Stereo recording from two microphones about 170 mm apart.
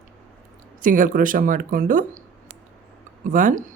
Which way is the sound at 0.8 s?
50° right (ahead or behind).